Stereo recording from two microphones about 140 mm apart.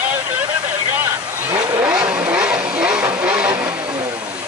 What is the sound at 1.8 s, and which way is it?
Vehicle, 10° right (ahead or behind).